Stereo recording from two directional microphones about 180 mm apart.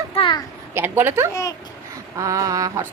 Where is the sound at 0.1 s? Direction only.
30° left (ahead or behind).